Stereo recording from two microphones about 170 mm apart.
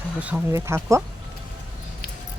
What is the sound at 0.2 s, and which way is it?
Speech, 10° right (ahead or behind).